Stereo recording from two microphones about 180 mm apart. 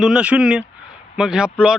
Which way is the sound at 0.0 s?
5° right (ahead or behind).